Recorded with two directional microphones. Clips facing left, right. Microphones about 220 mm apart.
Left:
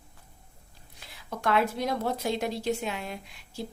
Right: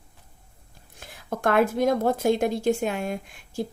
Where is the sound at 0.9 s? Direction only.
50° right (ahead or behind).